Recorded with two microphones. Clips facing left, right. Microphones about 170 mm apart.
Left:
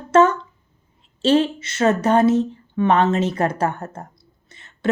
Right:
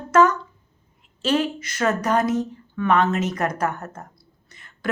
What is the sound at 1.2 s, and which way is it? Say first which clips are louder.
A woman's voice: left 5 dB; 30° left (ahead or behind).